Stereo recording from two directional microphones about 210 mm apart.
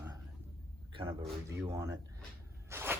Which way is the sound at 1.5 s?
15° right (ahead or behind).